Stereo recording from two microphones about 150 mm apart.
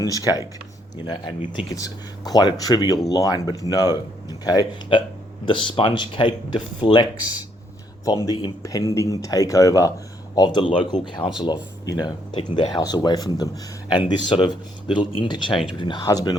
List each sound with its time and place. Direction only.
0.0 s speech: 25° left (ahead or behind)